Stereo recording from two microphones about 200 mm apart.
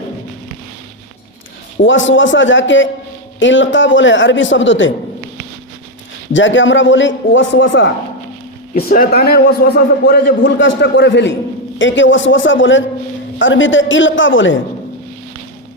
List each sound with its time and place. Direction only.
1.8 s a man's voice: 70° left (ahead or behind)
6.3 s a man's voice: 70° left (ahead or behind)
8.7 s a man's voice: 45° left (ahead or behind); by 14.6 s 70° left (ahead or behind)